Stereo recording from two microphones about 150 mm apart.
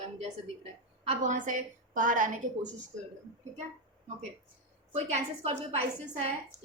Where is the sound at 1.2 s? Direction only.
55° right (ahead or behind).